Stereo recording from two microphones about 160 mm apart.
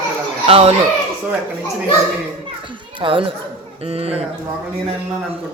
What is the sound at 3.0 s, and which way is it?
Speech, 30° right (ahead or behind).